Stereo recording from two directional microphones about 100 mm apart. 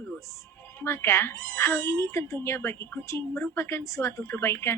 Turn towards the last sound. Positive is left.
turn(degrees=25)  # may be behind; listen again after turning